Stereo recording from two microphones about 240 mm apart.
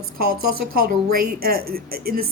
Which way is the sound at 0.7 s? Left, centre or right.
Right.